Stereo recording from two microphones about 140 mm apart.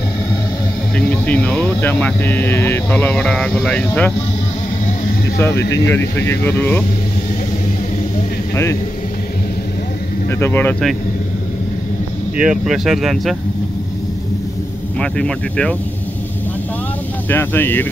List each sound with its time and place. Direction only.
0.9 s speech: 10° left (ahead or behind)
5.4 s speech: 15° left (ahead or behind)
10.2 s speech: 15° left (ahead or behind)
12.4 s speech: 5° right (ahead or behind)
15.0 s speech: 5° left (ahead or behind)
17.3 s speech: 15° left (ahead or behind)